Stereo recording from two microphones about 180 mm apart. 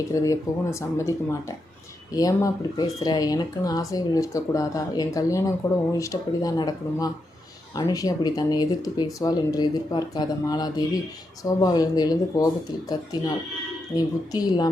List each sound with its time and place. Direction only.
0.1 s speech: 15° left (ahead or behind)
2.1 s speech: 20° left (ahead or behind)
13.9 s speech: 20° left (ahead or behind)